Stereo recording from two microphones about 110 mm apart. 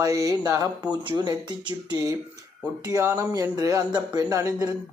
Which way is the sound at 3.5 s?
35° right (ahead or behind).